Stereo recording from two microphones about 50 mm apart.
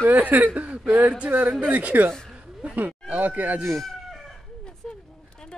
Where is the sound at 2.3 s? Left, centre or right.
Right.